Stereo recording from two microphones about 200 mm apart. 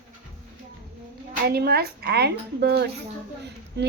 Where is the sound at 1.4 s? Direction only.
50° right (ahead or behind).